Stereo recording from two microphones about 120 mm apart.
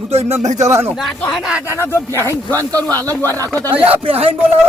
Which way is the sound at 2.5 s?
30° right (ahead or behind).